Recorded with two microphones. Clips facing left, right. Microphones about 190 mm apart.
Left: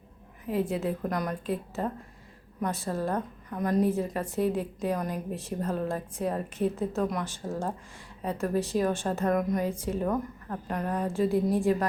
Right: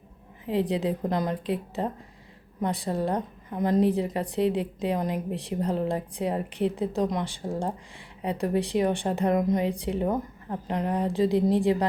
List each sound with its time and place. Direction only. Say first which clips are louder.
0.6 s a woman's voice: right 3 dB; 15° right (ahead or behind)